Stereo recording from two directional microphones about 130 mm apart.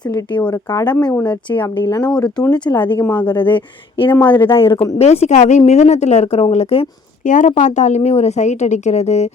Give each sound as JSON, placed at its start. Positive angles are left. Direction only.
{"t": 0.5, "sound": "speech", "side_deg": 30}
{"t": 2.0, "sound": "speech", "side_deg": 10}
{"t": 2.6, "sound": "speech", "side_deg": 35}
{"t": 3.0, "sound": "speech", "side_deg": 10}
{"t": 4.4, "sound": "speech", "side_deg": 40}
{"t": 4.9, "sound": "a woman's voice", "side_deg": 55}
{"t": 7.3, "sound": "a woman's voice", "side_deg": 75}